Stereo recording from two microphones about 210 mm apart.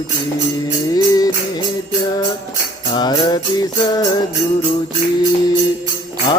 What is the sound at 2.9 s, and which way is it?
Music, 20° left (ahead or behind).